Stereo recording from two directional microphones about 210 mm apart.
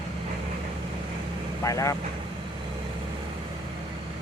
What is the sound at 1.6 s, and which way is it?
Speech, 15° left (ahead or behind).